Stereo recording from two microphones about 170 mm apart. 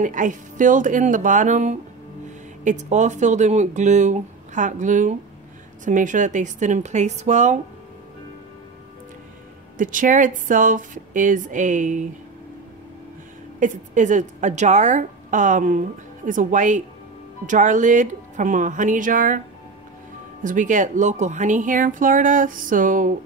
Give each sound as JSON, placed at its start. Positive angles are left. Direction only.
{"t": 0.0, "sound": "speech", "side_deg": -50}
{"t": 9.8, "sound": "speech", "side_deg": -50}
{"t": 13.6, "sound": "speech", "side_deg": -45}
{"t": 20.4, "sound": "speech", "side_deg": -50}